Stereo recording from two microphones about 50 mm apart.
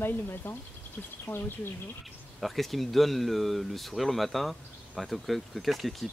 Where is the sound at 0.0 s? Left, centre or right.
Left.